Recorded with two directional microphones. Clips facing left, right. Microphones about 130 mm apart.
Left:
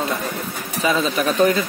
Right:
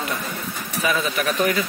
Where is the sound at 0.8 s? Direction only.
25° left (ahead or behind).